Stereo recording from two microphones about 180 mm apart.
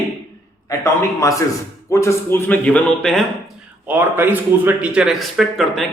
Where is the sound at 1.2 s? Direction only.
20° left (ahead or behind); by 3.2 s 5° left (ahead or behind).